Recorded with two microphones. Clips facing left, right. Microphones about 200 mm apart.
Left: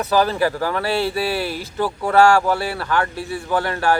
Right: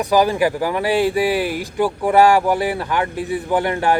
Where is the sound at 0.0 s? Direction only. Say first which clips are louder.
Right 2 dB; 15° right (ahead or behind).